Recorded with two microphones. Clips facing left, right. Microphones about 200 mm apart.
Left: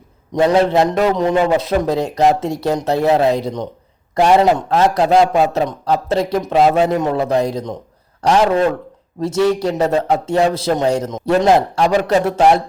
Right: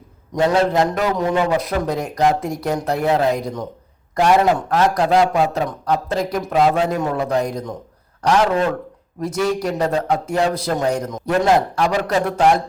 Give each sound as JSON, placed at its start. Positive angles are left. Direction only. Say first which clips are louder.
{"t": 0.3, "sound": "a man's voice", "louder": "left 3 dB", "side_deg": 20}